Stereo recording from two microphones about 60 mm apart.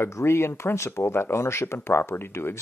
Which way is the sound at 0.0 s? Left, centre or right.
Left.